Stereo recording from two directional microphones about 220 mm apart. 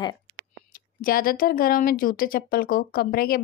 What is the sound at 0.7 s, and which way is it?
Speech, 40° left (ahead or behind).